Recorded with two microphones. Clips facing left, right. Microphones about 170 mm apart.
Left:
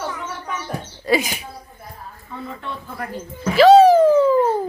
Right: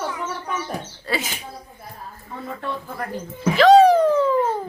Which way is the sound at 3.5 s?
5° left (ahead or behind).